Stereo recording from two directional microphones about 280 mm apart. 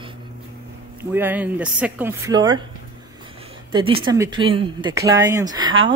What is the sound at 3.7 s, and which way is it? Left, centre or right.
Speech, centre.